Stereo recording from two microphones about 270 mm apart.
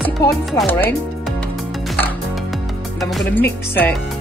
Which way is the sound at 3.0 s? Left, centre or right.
Centre.